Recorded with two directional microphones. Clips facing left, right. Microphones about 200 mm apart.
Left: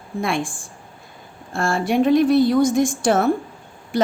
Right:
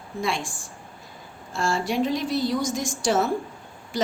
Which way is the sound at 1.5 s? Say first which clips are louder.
Left 5 dB; 55° left (ahead or behind).